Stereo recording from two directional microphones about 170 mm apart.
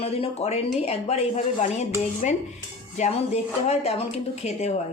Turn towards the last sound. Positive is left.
turn(degrees=40)  # may be behind; listen again after turning